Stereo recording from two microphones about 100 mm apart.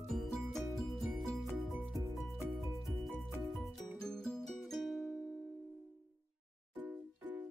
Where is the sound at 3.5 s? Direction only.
5° left (ahead or behind).